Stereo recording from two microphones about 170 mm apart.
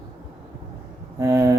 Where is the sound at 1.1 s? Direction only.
20° right (ahead or behind).